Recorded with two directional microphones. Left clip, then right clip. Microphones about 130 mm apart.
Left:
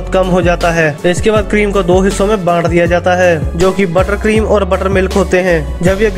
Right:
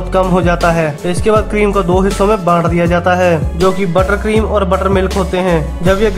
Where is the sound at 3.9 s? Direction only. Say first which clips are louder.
Left 1 dB; 30° left (ahead or behind).